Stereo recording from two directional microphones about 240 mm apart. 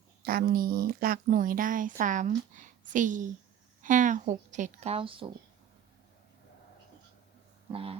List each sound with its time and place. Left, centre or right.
0.3 s a woman's voice: right
7.7 s speech: right